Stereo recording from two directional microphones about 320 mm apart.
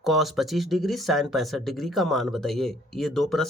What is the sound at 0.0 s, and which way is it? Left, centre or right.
Speech, centre.